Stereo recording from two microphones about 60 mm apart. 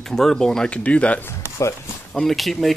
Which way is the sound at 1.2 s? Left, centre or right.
Left.